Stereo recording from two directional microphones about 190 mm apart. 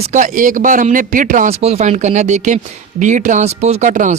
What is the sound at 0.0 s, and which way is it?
Speech, 40° right (ahead or behind).